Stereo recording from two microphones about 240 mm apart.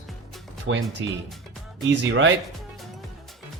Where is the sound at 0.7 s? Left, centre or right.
Right.